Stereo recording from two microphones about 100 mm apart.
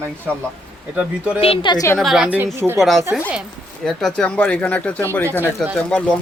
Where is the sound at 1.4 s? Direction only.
70° left (ahead or behind).